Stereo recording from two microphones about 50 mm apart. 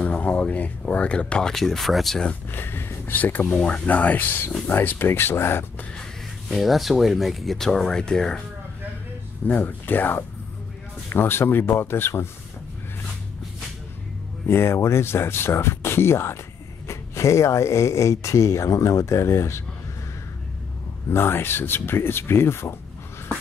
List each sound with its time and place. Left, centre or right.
0.0 s speech: left
1.5 s speech: centre
2.5 s speech: left
6.5 s speech: centre
9.5 s speech: left
14.5 s speech: left
16.8 s speech: left
21.1 s speech: left